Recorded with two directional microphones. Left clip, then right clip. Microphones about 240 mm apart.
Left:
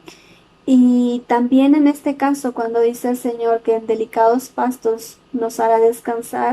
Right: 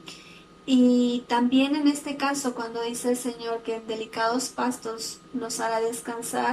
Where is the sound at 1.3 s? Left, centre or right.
Left.